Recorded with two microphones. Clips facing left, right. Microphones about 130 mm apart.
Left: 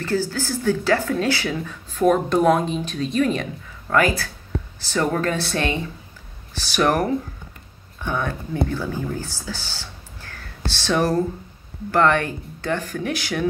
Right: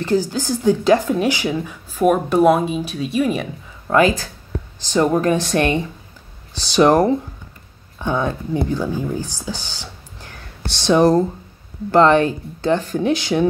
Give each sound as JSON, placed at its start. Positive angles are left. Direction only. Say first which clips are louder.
{"t": 0.0, "sound": "speech", "louder": "right 4 dB", "side_deg": -15}
{"t": 3.8, "sound": "speech", "louder": "right 4 dB", "side_deg": -20}